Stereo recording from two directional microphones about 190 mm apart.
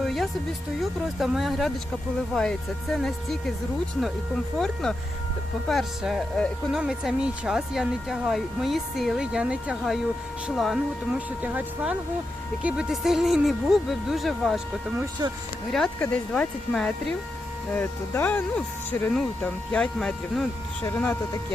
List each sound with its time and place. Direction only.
0.0 s music: centre (ahead or behind)
0.8 s speech: centre (ahead or behind)
4.5 s speech: centre (ahead or behind)
15.2 s speech: 20° right (ahead or behind)
15.7 s speech: 5° left (ahead or behind)